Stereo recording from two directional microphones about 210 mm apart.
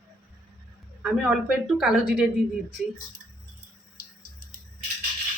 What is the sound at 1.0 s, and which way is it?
A woman's voice, 5° right (ahead or behind).